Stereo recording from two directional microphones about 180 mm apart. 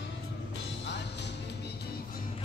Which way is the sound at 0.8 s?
75° left (ahead or behind).